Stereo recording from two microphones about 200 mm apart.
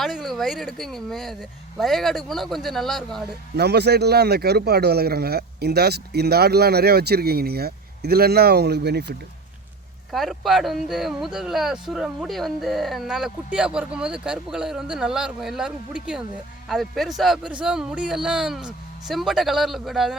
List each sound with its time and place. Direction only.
0.0 s speech: centre (ahead or behind)
3.5 s a man's voice: 55° right (ahead or behind)
10.1 s speech: centre (ahead or behind)